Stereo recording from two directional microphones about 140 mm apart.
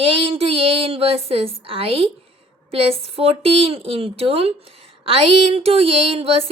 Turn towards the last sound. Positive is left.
turn(degrees=-45)  # may be behind; listen again after turning